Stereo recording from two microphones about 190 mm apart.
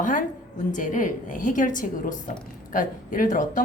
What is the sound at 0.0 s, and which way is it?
A woman's voice, 45° left (ahead or behind).